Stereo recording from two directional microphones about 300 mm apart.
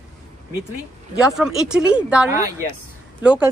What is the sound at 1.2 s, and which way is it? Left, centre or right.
A woman's voice, centre.